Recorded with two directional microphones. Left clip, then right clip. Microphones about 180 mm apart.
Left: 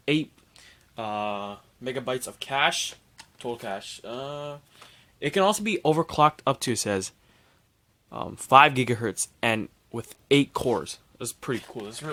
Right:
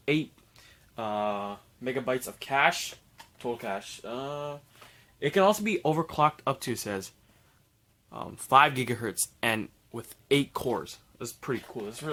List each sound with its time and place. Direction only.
0.0 s speech: 30° left (ahead or behind)
8.1 s speech: 35° left (ahead or behind)